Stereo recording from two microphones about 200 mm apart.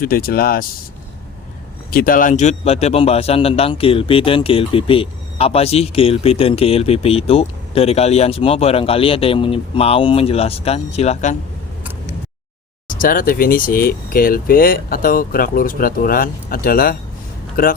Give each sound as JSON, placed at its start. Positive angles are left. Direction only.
{"t": 0.0, "sound": "speech", "side_deg": 45}
{"t": 1.9, "sound": "a man's voice", "side_deg": 45}
{"t": 12.9, "sound": "speech", "side_deg": 45}